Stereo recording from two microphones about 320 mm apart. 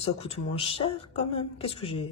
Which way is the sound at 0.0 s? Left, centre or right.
Centre.